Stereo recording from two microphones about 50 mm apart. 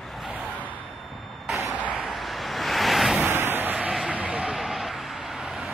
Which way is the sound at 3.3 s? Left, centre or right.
Right.